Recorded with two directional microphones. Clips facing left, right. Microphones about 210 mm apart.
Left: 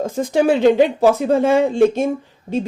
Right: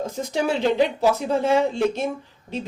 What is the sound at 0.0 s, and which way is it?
Speech, 50° left (ahead or behind).